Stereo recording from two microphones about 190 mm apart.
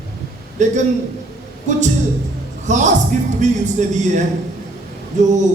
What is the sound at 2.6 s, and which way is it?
A man's voice, 40° right (ahead or behind).